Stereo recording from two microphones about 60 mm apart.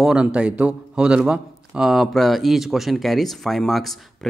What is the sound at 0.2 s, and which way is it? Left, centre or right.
A man's voice, centre.